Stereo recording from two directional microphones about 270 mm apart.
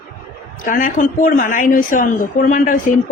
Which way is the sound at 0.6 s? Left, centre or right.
Left.